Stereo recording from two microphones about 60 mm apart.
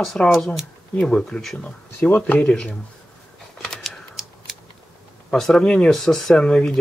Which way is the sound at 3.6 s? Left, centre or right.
Centre.